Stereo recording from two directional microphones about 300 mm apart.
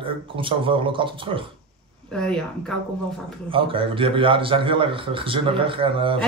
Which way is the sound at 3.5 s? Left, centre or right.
Centre.